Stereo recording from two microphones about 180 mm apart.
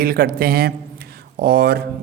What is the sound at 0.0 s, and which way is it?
A man's voice, 55° right (ahead or behind).